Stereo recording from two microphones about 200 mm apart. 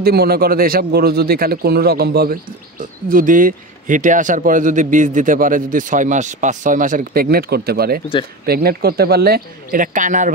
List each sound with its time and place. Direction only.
0.0 s a man's voice: 50° right (ahead or behind)